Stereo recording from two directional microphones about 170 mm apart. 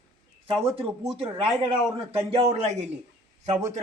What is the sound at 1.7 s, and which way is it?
A man's voice, 35° right (ahead or behind).